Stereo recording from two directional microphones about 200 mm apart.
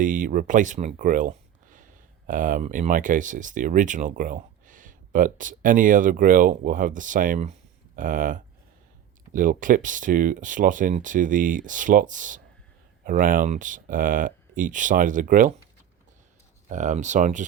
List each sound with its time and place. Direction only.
0.0 s speech: 40° right (ahead or behind)
16.6 s speech: 35° right (ahead or behind)